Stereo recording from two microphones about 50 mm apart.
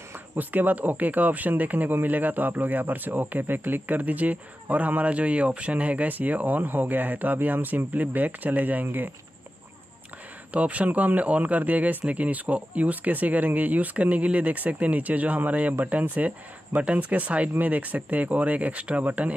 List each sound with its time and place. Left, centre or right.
0.4 s speech: right
10.5 s speech: right